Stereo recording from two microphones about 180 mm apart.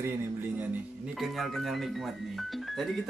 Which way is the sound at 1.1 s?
Centre (ahead or behind).